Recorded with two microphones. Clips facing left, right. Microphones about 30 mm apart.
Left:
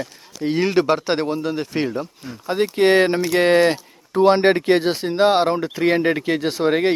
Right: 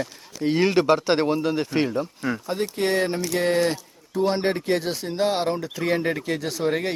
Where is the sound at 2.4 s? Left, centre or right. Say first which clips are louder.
Left 10 dB; left.